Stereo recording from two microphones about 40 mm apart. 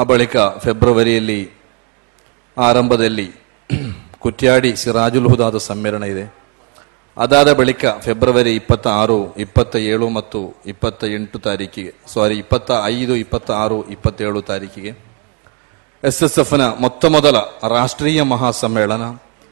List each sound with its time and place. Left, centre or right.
0.0 s a man's voice: centre
2.5 s a man's voice: centre
16.0 s a man's voice: centre